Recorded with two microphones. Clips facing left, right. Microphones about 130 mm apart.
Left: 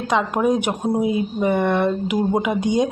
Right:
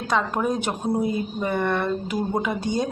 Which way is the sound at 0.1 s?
15° left (ahead or behind).